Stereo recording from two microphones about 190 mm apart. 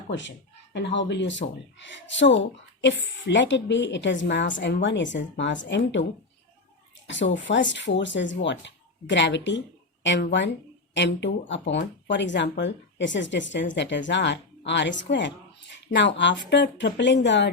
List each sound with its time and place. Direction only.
0.2 s speech: 70° left (ahead or behind)
7.1 s speech: 75° left (ahead or behind)